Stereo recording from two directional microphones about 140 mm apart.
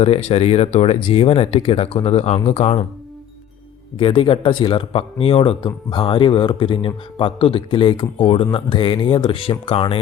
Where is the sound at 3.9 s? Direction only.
40° left (ahead or behind).